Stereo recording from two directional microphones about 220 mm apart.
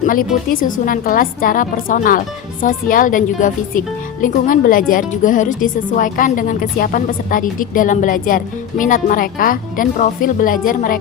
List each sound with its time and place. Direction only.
0.0 s a woman's voice: 40° left (ahead or behind)